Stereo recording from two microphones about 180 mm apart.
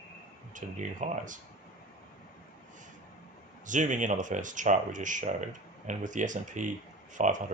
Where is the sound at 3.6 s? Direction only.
45° right (ahead or behind).